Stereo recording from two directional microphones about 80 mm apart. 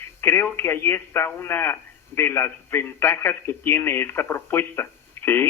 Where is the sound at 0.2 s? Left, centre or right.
Left.